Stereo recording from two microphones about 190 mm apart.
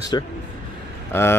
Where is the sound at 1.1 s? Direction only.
10° left (ahead or behind).